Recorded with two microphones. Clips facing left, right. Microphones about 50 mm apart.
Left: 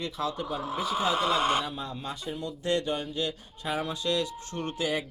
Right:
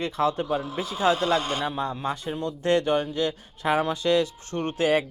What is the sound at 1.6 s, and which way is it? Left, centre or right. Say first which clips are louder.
Speech: right 8 dB; right.